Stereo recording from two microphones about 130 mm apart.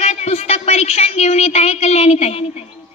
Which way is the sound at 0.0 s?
55° left (ahead or behind).